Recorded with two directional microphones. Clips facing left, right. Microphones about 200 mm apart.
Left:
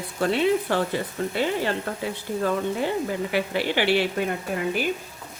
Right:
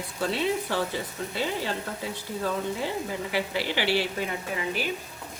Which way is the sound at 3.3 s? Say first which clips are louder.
Left 4 dB; 55° left (ahead or behind).